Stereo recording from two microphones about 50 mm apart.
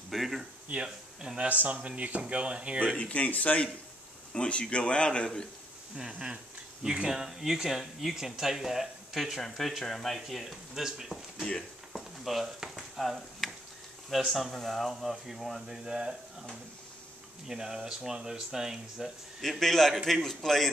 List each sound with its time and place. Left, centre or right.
0.1 s speech: centre
1.4 s speech: right
3.0 s a man's voice: left
4.3 s a man's voice: left
5.9 s speech: centre
11.9 s a sound: centre
14.1 s speech: centre
17.5 s speech: centre
19.6 s speech: centre